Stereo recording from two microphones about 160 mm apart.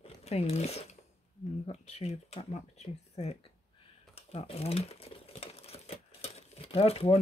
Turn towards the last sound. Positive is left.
turn(degrees=35)  # may be behind; listen again after turning